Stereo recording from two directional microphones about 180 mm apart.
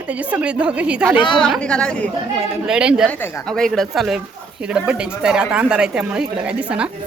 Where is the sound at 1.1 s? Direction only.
25° left (ahead or behind).